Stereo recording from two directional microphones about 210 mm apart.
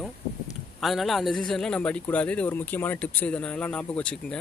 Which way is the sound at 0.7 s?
Centre (ahead or behind).